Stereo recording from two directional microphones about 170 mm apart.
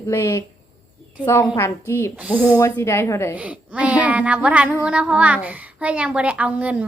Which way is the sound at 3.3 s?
10° right (ahead or behind).